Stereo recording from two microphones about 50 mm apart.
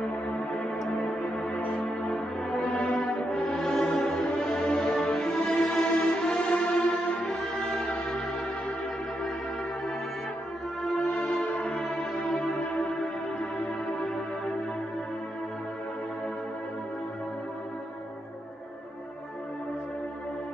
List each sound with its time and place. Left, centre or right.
0.5 s music: centre
1.8 s brass instrument: centre
11.1 s music: centre